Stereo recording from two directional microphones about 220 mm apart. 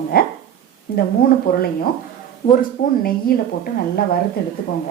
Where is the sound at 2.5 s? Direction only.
40° left (ahead or behind).